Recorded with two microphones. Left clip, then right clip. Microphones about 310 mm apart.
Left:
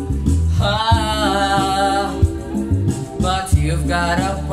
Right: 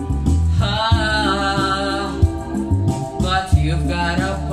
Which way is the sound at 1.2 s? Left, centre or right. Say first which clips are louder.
Left 2 dB; centre.